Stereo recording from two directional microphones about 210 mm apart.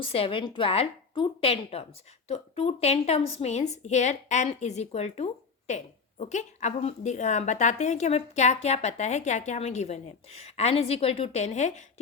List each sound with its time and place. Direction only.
0.0 s a woman's voice: 25° left (ahead or behind)